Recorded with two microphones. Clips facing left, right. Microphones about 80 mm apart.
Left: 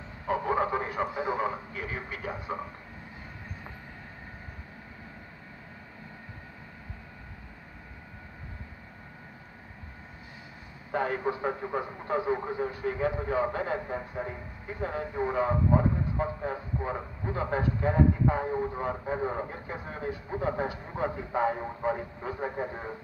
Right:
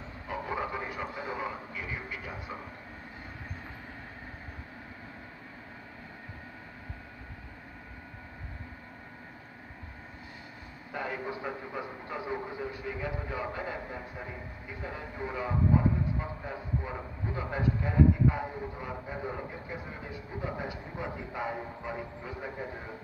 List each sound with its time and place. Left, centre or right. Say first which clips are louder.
0.3 s radio: left 7 dB; left
1.1 s a man's voice: left 6 dB; left
10.9 s a man's voice: left 7 dB; left